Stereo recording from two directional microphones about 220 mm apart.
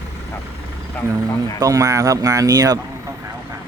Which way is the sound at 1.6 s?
15° right (ahead or behind).